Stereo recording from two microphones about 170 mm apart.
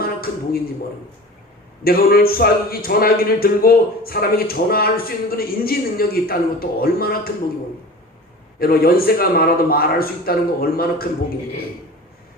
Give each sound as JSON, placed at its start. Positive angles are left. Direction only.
{"t": 0.0, "sound": "a sound", "side_deg": 60}
{"t": 1.8, "sound": "speech", "side_deg": 60}
{"t": 8.5, "sound": "speech", "side_deg": 60}